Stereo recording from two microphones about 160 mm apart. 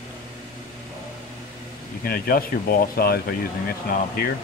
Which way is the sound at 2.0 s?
70° left (ahead or behind).